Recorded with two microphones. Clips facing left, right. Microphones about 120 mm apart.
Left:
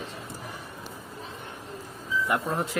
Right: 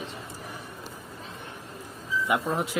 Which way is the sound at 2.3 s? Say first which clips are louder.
Right 2 dB; 5° right (ahead or behind).